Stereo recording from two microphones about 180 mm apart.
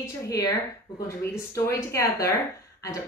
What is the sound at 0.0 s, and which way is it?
Speech, 15° left (ahead or behind).